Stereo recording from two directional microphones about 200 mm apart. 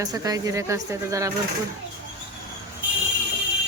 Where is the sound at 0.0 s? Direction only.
20° right (ahead or behind).